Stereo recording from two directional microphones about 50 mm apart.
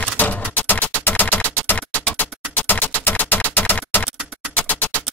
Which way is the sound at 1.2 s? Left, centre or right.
Left.